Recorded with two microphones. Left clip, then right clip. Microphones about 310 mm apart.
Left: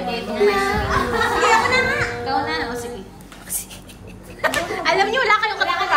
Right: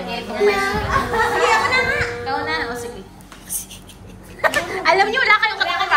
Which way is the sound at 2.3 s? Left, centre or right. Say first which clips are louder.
Even; centre.